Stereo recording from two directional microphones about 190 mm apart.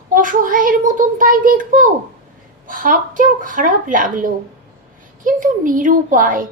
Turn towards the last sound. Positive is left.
turn(degrees=-45)  # may be behind; listen again after turning